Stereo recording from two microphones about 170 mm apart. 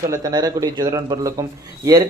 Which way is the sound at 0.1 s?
20° right (ahead or behind).